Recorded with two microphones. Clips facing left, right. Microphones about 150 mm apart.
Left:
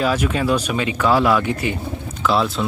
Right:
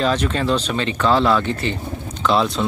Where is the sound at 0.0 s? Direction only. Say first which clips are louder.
Even; 10° left (ahead or behind).